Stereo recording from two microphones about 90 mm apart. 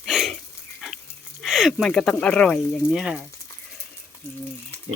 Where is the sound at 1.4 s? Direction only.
Centre (ahead or behind).